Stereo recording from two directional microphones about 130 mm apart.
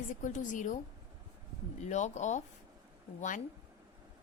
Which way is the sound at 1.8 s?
65° left (ahead or behind).